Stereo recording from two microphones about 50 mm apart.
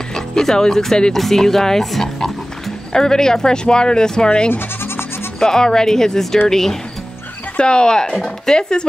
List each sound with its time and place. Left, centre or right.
0.1 s speech: centre
4.5 s goat: left
5.4 s speech: centre
7.5 s speech: centre